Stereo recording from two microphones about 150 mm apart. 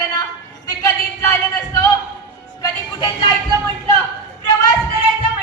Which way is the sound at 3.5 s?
30° right (ahead or behind).